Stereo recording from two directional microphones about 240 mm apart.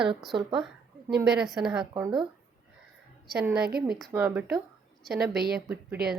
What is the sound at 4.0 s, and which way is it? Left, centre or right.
A woman's voice, centre.